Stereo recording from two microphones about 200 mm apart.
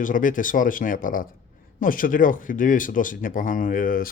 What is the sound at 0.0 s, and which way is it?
Speech, 40° left (ahead or behind).